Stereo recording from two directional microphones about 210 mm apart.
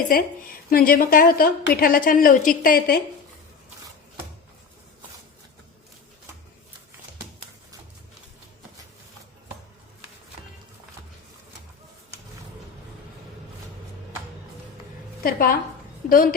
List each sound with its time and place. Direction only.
0.1 s a woman's voice: 45° left (ahead or behind)
15.2 s a woman's voice: 45° left (ahead or behind)